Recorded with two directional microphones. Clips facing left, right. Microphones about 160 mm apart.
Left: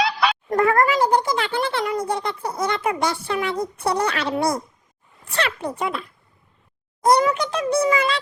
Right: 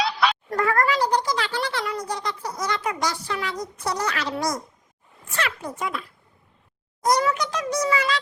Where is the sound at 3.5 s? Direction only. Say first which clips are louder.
Left 6 dB; 55° left (ahead or behind).